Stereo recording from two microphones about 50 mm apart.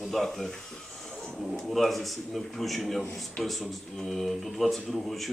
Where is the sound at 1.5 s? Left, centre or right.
Centre.